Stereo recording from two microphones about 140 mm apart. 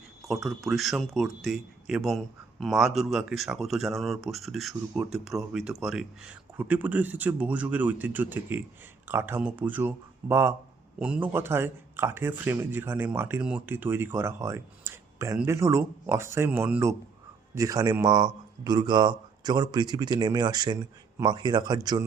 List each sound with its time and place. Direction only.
0.4 s speech: centre (ahead or behind); by 21.8 s 30° right (ahead or behind)